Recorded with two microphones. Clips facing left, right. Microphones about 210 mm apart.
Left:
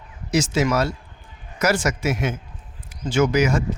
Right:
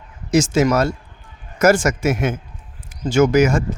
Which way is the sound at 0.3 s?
45° right (ahead or behind).